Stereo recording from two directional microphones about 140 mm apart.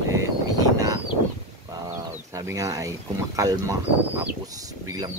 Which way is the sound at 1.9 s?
20° right (ahead or behind).